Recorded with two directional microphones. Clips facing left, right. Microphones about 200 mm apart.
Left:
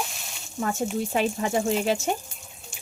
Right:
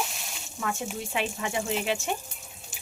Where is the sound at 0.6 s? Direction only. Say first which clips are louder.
Left 6 dB; 40° left (ahead or behind).